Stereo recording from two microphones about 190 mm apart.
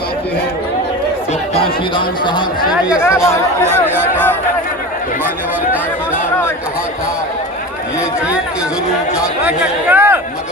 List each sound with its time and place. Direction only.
1.5 s speech: 25° left (ahead or behind)
3.0 s speech: 15° left (ahead or behind)
3.6 s speech: 10° right (ahead or behind)
9.1 s speech: 5° right (ahead or behind)